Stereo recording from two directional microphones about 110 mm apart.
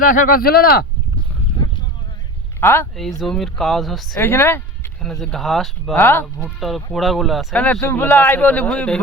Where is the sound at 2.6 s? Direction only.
20° left (ahead or behind).